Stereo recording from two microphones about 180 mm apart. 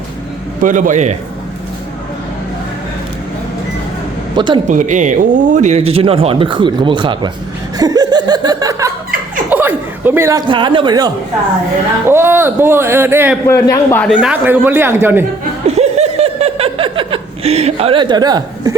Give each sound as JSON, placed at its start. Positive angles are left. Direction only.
{"t": 0.6, "sound": "a man's voice", "side_deg": -45}
{"t": 4.4, "sound": "speech", "side_deg": -25}
{"t": 4.7, "sound": "speech", "side_deg": -45}
{"t": 7.8, "sound": "laughter", "side_deg": -20}
{"t": 9.5, "sound": "speech", "side_deg": -10}
{"t": 13.5, "sound": "a man's voice", "side_deg": 15}
{"t": 14.2, "sound": "speech", "side_deg": -5}
{"t": 15.6, "sound": "laughter", "side_deg": -35}